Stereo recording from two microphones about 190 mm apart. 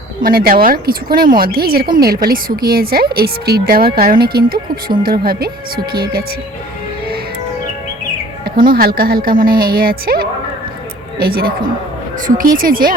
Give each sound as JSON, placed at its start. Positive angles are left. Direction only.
{"t": 0.2, "sound": "a woman's voice", "side_deg": -50}
{"t": 8.4, "sound": "a woman's voice", "side_deg": -50}